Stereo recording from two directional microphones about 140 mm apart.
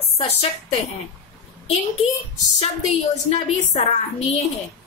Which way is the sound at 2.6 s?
50° left (ahead or behind).